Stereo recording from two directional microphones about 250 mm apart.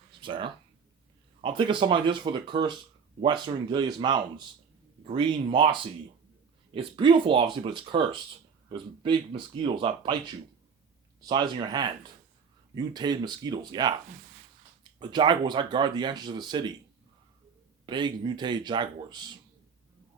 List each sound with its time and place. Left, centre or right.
0.2 s speech: centre
11.3 s speech: centre
14.9 s speech: centre
17.8 s speech: centre